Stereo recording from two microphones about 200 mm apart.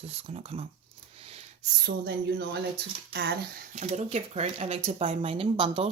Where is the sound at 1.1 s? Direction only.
30° right (ahead or behind).